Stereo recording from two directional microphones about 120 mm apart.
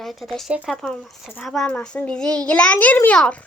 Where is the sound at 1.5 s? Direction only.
5° left (ahead or behind).